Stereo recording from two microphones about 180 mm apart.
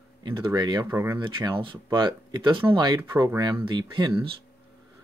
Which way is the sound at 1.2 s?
25° right (ahead or behind).